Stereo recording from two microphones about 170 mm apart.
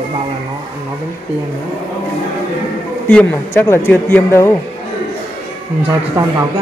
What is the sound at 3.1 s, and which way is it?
Speech, 10° left (ahead or behind).